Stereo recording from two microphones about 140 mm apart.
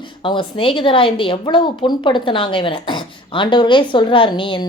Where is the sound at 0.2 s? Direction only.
35° left (ahead or behind).